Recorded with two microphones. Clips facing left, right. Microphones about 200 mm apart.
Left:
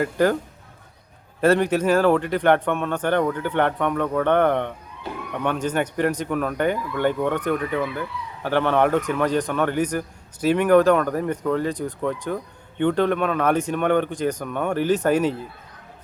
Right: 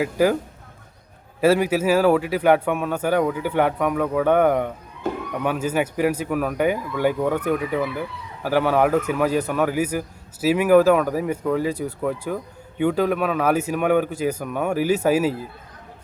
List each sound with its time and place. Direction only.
0.0 s a man's voice: 5° right (ahead or behind)
1.4 s a man's voice: 5° right (ahead or behind)
5.0 s a sound: 45° right (ahead or behind)
5.4 s a man's voice: 5° right (ahead or behind)